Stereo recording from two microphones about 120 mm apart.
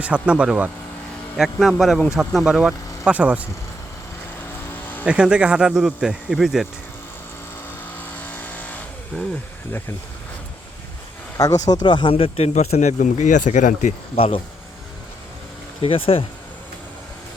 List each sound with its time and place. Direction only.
0.0 s a man's voice: 10° right (ahead or behind)
5.0 s speech: 10° right (ahead or behind)
7.9 s vehicle: 15° left (ahead or behind)
9.1 s a man's voice: 5° right (ahead or behind)
11.7 s speech: 40° left (ahead or behind); by 13.9 s 90° left
14.2 s speech: 50° left (ahead or behind)
15.8 s speech: 50° left (ahead or behind)